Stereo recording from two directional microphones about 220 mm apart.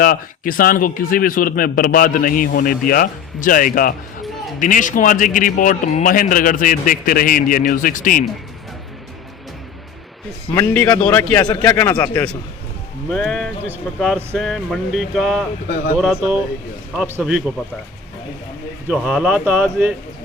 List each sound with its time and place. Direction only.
0.0 s speech: 40° left (ahead or behind)
10.5 s a man's voice: 15° left (ahead or behind); by 17.4 s 5° right (ahead or behind)
18.9 s speech: 5° right (ahead or behind)